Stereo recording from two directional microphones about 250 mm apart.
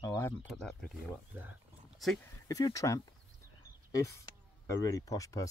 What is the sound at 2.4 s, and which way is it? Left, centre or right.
Speech, centre.